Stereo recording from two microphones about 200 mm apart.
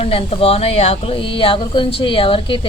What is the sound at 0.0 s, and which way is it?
Speech, 30° left (ahead or behind).